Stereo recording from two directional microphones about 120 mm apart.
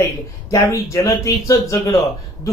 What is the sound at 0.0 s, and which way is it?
Speech, 25° left (ahead or behind).